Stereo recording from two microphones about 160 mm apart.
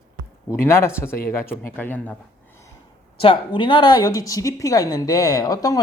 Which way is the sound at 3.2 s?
30° left (ahead or behind).